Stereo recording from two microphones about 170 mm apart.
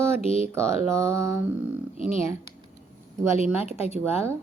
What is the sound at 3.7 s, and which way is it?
Speech, 40° left (ahead or behind).